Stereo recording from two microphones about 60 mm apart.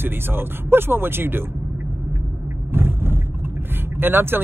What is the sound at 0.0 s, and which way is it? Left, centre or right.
Speech, right.